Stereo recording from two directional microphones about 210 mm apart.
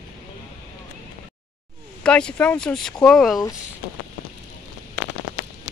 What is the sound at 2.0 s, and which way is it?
Speech, 5° left (ahead or behind).